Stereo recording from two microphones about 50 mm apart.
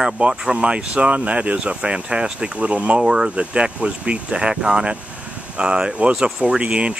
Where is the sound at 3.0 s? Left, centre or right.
Centre.